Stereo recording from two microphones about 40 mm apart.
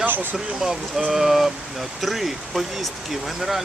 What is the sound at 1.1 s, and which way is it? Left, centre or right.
Speech, centre.